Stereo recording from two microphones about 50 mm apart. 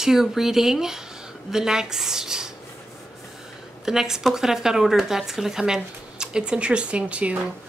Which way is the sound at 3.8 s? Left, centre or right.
Centre.